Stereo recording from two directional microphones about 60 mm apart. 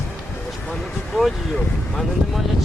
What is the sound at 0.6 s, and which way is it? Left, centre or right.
A man's voice, centre.